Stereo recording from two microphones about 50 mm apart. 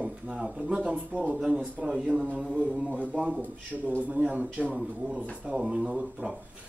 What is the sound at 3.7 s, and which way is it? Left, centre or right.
Speech, centre.